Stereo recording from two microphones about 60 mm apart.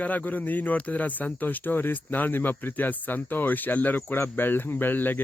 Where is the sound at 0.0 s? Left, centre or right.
Left.